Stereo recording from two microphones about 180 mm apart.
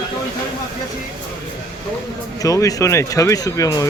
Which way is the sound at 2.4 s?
20° left (ahead or behind).